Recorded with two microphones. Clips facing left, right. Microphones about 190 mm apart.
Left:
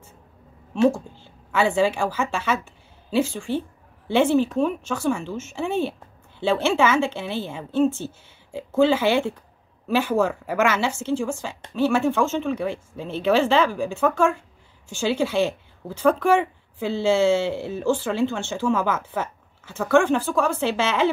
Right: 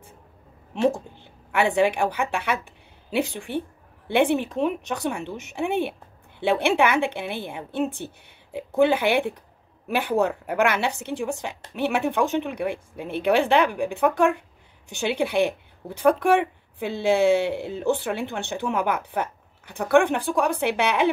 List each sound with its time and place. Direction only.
0.7 s a woman's voice: 15° right (ahead or behind)